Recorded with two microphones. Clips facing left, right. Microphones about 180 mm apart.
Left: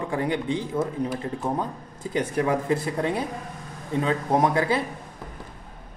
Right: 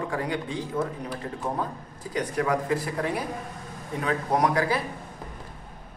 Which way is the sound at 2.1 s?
25° left (ahead or behind).